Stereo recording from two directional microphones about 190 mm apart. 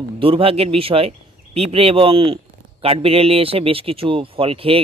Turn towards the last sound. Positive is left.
turn(degrees=-30)  # may be behind; listen again after turning